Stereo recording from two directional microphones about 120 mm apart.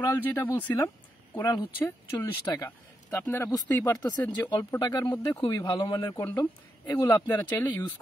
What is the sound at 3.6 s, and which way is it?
Speech, 30° left (ahead or behind).